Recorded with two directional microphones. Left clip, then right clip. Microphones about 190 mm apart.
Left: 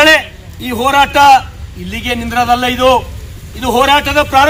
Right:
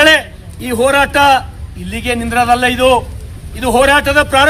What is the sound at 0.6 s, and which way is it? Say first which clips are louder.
Speech: right 1 dB; 25° right (ahead or behind).